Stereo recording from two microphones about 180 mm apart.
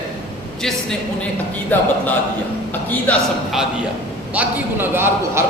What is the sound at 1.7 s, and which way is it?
Speech, 10° left (ahead or behind).